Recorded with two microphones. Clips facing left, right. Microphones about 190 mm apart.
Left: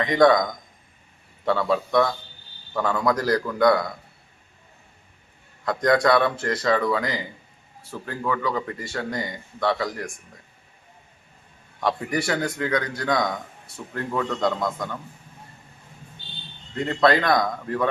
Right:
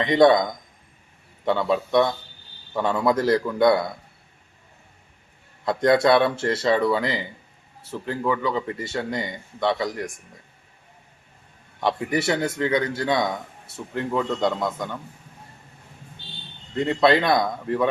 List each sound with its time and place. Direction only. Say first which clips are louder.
0.0 s speech: right 1 dB; 25° right (ahead or behind)
1.5 s speech: even; 20° right (ahead or behind)
5.6 s speech: right 2 dB; 25° right (ahead or behind)
12.1 s speech: right 2 dB; 25° right (ahead or behind)
14.3 s a man's voice: right 1 dB; 5° right (ahead or behind)
16.7 s speech: right 1 dB; 20° right (ahead or behind)